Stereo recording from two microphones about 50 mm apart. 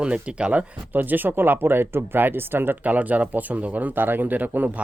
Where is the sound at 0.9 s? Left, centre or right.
Right.